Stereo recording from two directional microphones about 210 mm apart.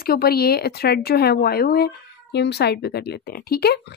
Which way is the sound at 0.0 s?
45° left (ahead or behind).